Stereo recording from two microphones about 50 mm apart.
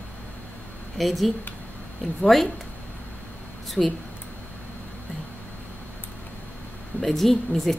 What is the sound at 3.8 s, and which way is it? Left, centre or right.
Speech, centre.